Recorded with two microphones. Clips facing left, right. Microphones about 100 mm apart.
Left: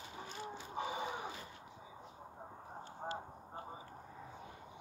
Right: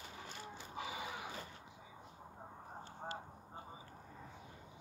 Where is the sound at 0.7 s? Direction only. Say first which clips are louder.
Left 5 dB; 40° left (ahead or behind).